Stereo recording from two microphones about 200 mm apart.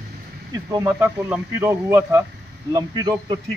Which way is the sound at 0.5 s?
15° right (ahead or behind).